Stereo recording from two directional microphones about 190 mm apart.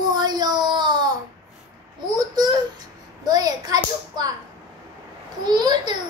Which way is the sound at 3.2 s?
20° right (ahead or behind).